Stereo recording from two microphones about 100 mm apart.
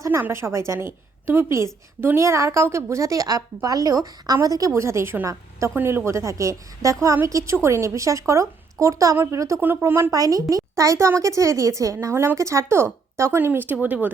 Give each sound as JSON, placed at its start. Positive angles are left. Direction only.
{"t": 0.2, "sound": "a woman's voice", "side_deg": -25}
{"t": 10.1, "sound": "a woman's voice", "side_deg": -35}